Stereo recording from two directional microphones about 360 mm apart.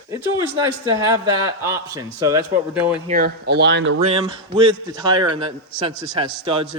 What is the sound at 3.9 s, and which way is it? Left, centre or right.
Speech, centre.